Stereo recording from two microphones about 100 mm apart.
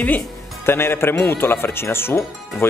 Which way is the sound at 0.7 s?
25° left (ahead or behind).